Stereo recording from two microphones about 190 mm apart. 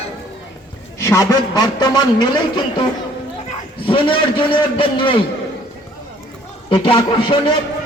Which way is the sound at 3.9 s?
25° left (ahead or behind).